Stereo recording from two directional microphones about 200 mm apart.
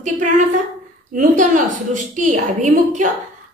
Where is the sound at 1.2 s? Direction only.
40° right (ahead or behind).